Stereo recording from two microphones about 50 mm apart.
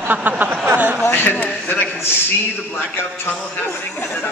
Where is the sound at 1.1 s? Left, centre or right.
Left.